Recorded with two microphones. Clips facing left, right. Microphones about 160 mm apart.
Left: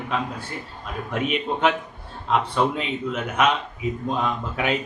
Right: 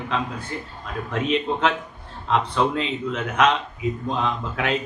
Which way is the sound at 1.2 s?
5° left (ahead or behind).